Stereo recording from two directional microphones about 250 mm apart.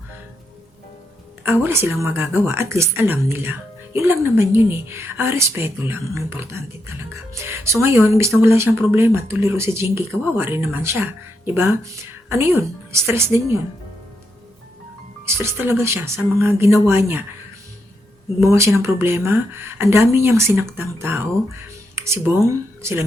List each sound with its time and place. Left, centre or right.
1.5 s a woman's voice: centre
15.4 s a woman's voice: centre
18.3 s a woman's voice: centre